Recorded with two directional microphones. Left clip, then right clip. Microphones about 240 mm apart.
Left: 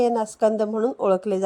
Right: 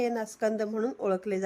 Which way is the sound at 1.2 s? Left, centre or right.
Left.